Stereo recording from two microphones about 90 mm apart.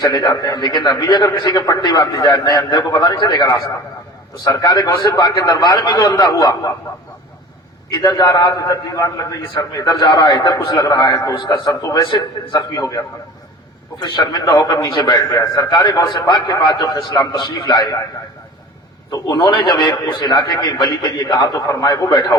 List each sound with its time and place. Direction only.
0.0 s a man's voice: 45° left (ahead or behind)
7.9 s a man's voice: 50° left (ahead or behind)
12.0 s a man's voice: 60° left (ahead or behind)
12.5 s a man's voice: 40° left (ahead or behind)
14.0 s a man's voice: 50° left (ahead or behind)
15.1 s a man's voice: 40° left (ahead or behind)
19.4 s a man's voice: 65° left (ahead or behind)